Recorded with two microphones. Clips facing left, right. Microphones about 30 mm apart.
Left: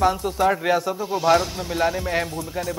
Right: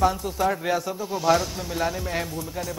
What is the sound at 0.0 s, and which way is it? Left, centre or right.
Speech, centre.